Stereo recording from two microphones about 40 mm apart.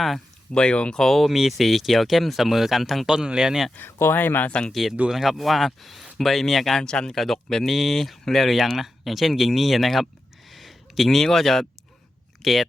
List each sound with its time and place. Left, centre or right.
0.5 s speech: left
0.9 s speech: centre
1.3 s speech: centre
3.1 s speech: centre
3.8 s speech: left
4.2 s speech: left
4.7 s speech: centre
6.8 s speech: centre
7.2 s speech: centre
10.5 s a sound: centre
12.4 s speech: centre